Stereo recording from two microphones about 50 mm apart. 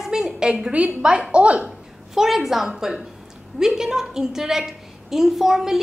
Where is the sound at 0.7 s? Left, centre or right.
Right.